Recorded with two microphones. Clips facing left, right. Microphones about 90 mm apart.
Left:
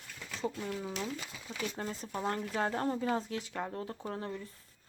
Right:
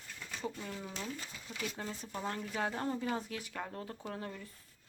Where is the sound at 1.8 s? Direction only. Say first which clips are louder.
Left 4 dB; 35° left (ahead or behind).